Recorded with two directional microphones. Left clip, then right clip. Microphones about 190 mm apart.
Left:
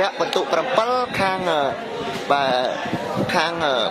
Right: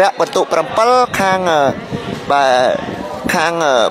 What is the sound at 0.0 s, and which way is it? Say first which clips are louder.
A man's voice: right 8 dB; 40° right (ahead or behind).